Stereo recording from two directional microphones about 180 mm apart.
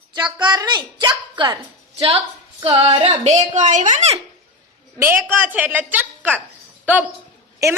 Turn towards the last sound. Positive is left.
turn(degrees=-15)  # may be behind; listen again after turning